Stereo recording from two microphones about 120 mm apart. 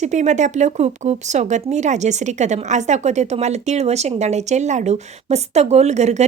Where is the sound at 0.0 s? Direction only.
80° right.